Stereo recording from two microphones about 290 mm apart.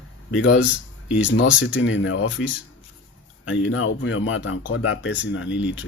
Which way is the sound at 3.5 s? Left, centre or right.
Left.